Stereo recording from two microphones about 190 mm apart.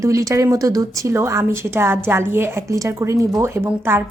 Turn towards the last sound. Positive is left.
turn(degrees=-10)  # may be behind; listen again after turning